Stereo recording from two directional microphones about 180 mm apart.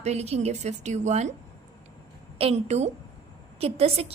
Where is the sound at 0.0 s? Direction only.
35° right (ahead or behind).